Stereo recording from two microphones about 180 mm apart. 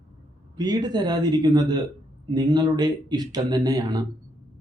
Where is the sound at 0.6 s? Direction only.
20° right (ahead or behind).